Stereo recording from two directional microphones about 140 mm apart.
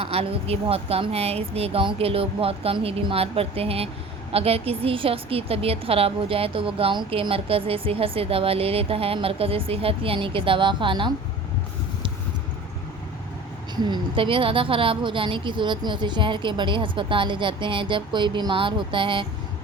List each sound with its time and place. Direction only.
0.0 s a woman's voice: 45° right (ahead or behind)
13.8 s speech: 35° right (ahead or behind)